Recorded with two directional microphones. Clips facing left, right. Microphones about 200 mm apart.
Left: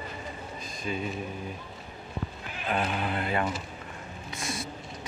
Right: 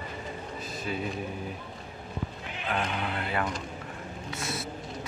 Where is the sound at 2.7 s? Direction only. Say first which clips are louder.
Left 2 dB; 10° left (ahead or behind).